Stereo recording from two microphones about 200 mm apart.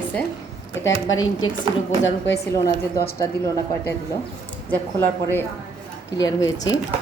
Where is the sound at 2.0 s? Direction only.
60° left (ahead or behind).